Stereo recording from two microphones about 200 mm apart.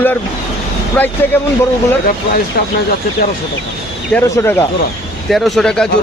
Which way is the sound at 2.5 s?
50° left (ahead or behind).